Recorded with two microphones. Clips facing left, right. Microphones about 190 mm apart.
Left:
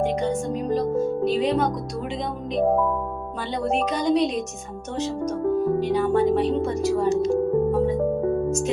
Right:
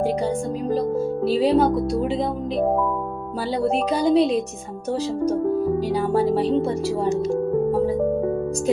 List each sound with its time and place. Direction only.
0.0 s speech: 30° right (ahead or behind)
3.9 s music: 30° right (ahead or behind)
5.8 s music: 35° right (ahead or behind)